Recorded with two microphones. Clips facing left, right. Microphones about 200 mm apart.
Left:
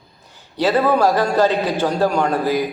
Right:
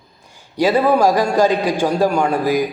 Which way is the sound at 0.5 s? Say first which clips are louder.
Right 2 dB; 10° right (ahead or behind).